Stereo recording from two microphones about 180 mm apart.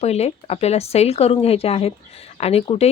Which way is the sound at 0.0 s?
35° left (ahead or behind).